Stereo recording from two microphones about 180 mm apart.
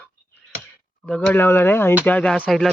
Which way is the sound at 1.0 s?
5° left (ahead or behind).